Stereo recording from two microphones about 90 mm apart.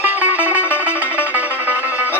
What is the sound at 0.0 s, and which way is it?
Music, 15° right (ahead or behind).